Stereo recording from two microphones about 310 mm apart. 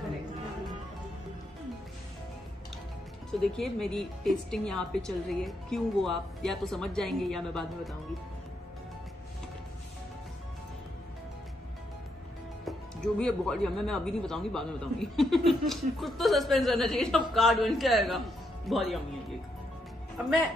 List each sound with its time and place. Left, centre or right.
3.3 s a woman's voice: centre
12.6 s a woman's voice: centre